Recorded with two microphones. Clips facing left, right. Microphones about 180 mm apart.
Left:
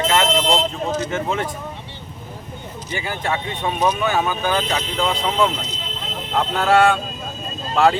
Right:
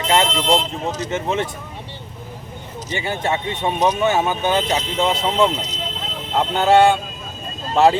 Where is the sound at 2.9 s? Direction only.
25° right (ahead or behind).